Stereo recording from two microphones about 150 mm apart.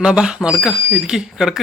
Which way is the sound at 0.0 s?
5° right (ahead or behind).